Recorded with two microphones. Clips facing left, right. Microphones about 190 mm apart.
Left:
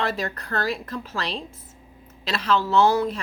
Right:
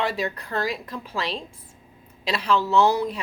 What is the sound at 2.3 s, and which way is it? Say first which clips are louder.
Speech: even; 15° right (ahead or behind).